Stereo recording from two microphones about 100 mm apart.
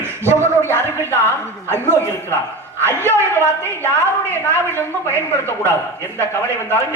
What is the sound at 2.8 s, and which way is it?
A woman's voice, 25° right (ahead or behind).